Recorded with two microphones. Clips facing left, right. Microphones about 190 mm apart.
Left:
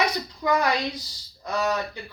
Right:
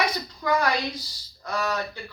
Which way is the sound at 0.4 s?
15° left (ahead or behind).